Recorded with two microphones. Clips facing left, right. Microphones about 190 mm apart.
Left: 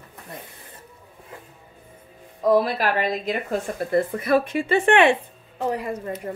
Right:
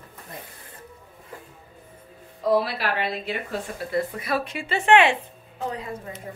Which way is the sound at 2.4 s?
45° left (ahead or behind).